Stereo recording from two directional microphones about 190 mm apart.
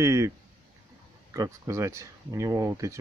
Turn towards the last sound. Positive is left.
turn(degrees=-15)  # may be behind; listen again after turning